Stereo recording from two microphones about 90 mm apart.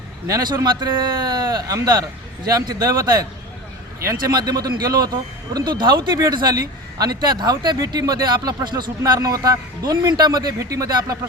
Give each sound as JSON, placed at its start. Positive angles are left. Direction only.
{"t": 0.3, "sound": "speech", "side_deg": -45}
{"t": 4.3, "sound": "speech", "side_deg": -45}
{"t": 5.5, "sound": "speech", "side_deg": -55}